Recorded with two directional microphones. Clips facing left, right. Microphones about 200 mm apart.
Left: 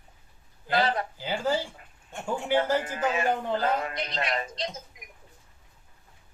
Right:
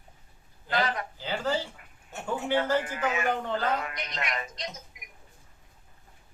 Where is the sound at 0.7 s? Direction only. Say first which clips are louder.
Left 3 dB; 30° left (ahead or behind).